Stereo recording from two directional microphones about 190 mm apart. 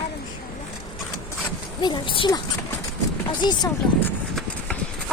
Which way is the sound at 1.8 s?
25° left (ahead or behind).